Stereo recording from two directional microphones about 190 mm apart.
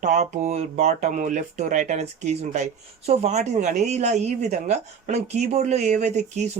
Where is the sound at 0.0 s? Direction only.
40° right (ahead or behind).